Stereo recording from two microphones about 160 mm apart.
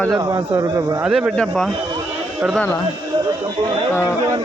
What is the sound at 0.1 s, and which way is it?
Speech, 25° right (ahead or behind).